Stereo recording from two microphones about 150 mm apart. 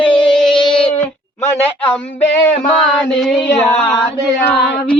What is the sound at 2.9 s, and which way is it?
Speech, centre (ahead or behind).